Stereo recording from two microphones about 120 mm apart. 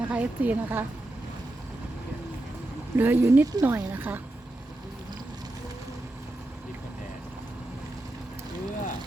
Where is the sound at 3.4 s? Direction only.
30° right (ahead or behind).